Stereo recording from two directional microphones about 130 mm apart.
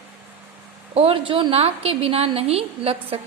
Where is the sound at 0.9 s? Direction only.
45° right (ahead or behind).